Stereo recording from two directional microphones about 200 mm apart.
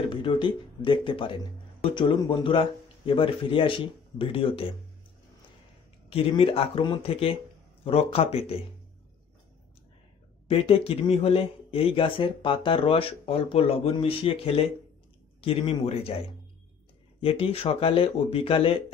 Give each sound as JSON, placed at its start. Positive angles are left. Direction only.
{"t": 0.1, "sound": "speech", "side_deg": 25}
{"t": 6.0, "sound": "speech", "side_deg": 25}
{"t": 10.5, "sound": "speech", "side_deg": 30}
{"t": 17.2, "sound": "speech", "side_deg": 25}